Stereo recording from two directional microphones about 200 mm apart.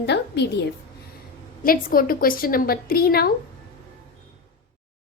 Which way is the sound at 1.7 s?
45° left (ahead or behind).